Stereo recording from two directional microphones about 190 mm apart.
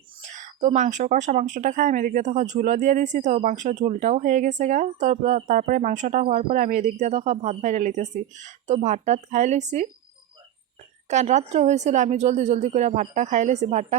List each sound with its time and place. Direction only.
0.2 s speech: 40° right (ahead or behind)
11.1 s speech: 40° right (ahead or behind)